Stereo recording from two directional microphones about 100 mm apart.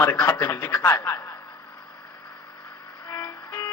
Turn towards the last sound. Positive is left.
turn(degrees=35)  # may be behind; listen again after turning